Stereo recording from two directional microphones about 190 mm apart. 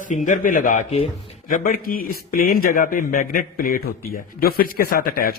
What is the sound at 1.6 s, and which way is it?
Speech, 50° left (ahead or behind).